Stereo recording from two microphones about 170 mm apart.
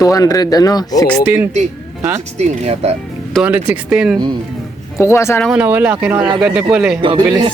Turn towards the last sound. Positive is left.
turn(degrees=-30)  # may be behind; listen again after turning